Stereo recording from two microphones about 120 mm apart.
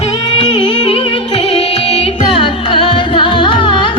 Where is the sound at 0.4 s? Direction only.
45° left (ahead or behind).